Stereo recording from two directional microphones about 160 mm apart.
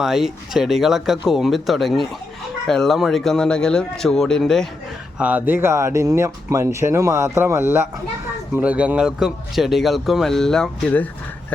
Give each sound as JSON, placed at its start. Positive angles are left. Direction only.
{"t": 0.0, "sound": "a man's voice", "side_deg": 0}
{"t": 5.1, "sound": "a man's voice", "side_deg": -10}